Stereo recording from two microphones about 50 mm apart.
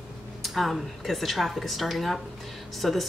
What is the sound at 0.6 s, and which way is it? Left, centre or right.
A woman's voice, centre.